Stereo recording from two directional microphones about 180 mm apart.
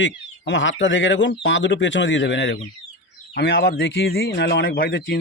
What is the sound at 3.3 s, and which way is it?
A man's voice, 70° left (ahead or behind).